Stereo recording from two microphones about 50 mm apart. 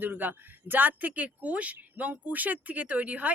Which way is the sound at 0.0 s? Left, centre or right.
Right.